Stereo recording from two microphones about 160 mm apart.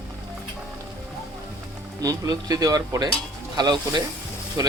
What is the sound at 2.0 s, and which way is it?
Speech, 25° right (ahead or behind).